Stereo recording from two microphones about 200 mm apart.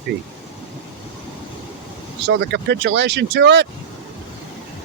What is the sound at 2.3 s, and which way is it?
Speech, 55° right (ahead or behind).